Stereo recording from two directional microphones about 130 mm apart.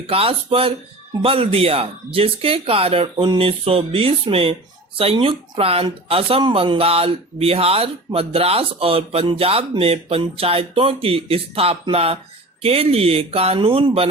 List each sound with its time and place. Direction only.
0.1 s speech: 45° right (ahead or behind)